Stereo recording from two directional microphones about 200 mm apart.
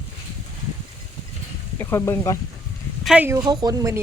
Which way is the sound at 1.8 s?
15° left (ahead or behind).